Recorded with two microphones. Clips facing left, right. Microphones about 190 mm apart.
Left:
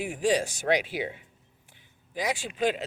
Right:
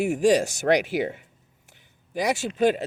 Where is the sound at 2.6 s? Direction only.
45° right (ahead or behind).